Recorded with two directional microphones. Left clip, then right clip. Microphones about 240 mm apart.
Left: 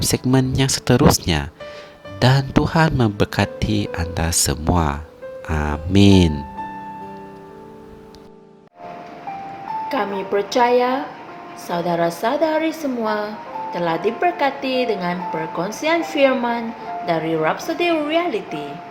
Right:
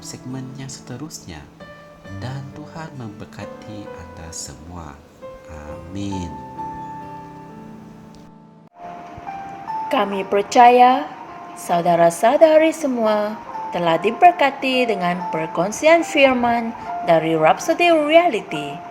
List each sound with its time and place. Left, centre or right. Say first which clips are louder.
0.0 s speech: left 14 dB; left
9.9 s a woman's voice: right 3 dB; right
14.6 s a woman's voice: right 2 dB; centre
14.8 s speech: right 1 dB; right
16.0 s a woman's voice: right 3 dB; centre
16.2 s a woman's voice: right 2 dB; right